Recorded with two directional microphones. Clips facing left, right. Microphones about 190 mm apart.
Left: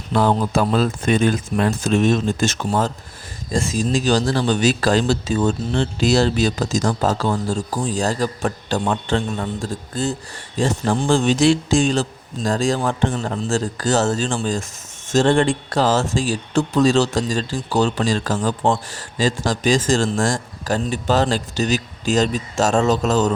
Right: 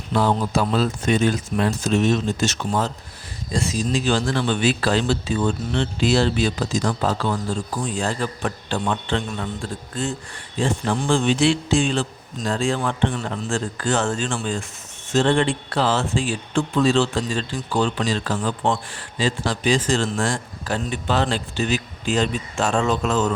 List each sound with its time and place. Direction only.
0.1 s a man's voice: 50° left (ahead or behind)